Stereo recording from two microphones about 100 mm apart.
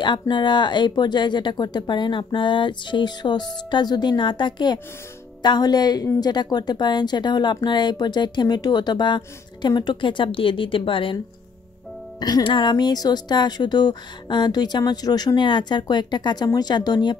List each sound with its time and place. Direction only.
0.0 s speech: 50° left (ahead or behind)
12.2 s speech: 45° left (ahead or behind)